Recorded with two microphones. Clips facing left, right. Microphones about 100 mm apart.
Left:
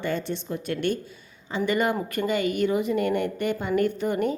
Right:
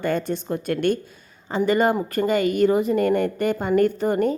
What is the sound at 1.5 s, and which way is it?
A woman's voice, 35° right (ahead or behind).